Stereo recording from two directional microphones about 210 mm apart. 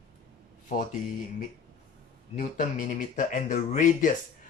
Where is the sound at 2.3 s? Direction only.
35° left (ahead or behind).